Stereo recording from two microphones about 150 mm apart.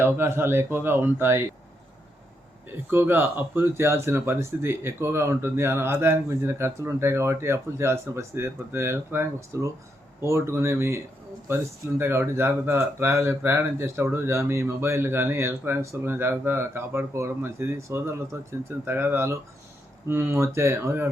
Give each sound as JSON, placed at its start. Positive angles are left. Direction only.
{"t": 0.0, "sound": "speech", "side_deg": -15}
{"t": 2.9, "sound": "speech", "side_deg": -15}